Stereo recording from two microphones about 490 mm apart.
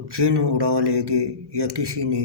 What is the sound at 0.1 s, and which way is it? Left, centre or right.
Speech, right.